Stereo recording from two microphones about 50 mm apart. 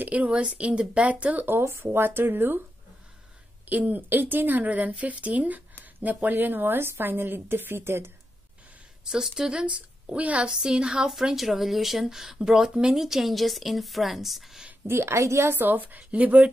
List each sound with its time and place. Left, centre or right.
0.0 s a woman's voice: right
1.6 s a woman's voice: right
3.6 s speech: right
6.3 s a woman's voice: right
9.0 s a woman's voice: centre
10.5 s a woman's voice: centre
11.3 s a woman's voice: centre
14.9 s a woman's voice: right
15.5 s speech: right